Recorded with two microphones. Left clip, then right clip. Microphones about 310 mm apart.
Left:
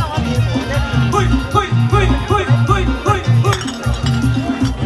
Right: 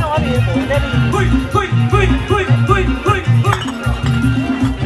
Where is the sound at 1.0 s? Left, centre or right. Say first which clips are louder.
Even; left.